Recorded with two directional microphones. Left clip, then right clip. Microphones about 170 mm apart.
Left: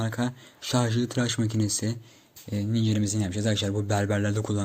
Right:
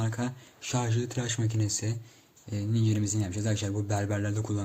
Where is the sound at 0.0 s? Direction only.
20° left (ahead or behind).